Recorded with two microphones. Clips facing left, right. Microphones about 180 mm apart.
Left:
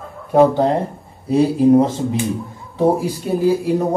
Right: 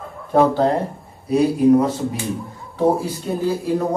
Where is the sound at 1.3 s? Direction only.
30° left (ahead or behind).